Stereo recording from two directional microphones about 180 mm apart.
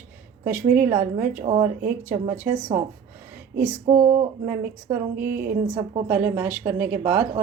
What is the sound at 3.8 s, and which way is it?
Speech, 35° right (ahead or behind).